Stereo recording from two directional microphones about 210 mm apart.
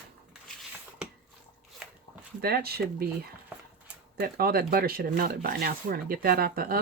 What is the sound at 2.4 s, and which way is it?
Speech, 45° right (ahead or behind).